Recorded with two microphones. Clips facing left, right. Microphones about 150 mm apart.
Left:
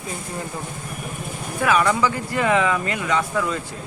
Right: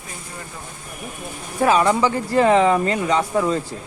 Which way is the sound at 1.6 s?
30° right (ahead or behind).